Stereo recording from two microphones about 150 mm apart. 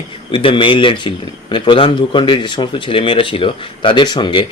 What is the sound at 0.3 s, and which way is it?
Speech, 35° left (ahead or behind).